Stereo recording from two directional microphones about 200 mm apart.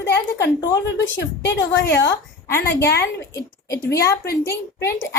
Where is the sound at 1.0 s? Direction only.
65° left (ahead or behind).